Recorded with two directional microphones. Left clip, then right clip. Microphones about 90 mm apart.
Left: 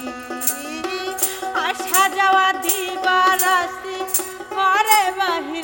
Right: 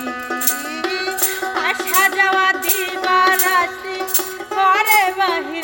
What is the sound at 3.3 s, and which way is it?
Music, 55° left (ahead or behind).